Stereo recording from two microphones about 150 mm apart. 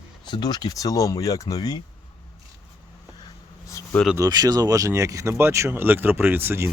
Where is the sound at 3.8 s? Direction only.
20° left (ahead or behind).